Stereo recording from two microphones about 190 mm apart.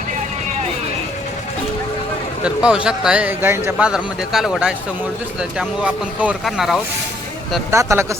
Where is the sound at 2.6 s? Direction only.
5° right (ahead or behind).